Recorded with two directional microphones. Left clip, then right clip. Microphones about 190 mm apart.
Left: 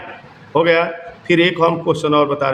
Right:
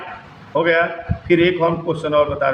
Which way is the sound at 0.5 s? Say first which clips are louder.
Left 2 dB; 70° left (ahead or behind).